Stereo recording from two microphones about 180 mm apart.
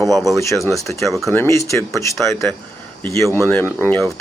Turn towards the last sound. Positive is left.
turn(degrees=10)  # may be behind; listen again after turning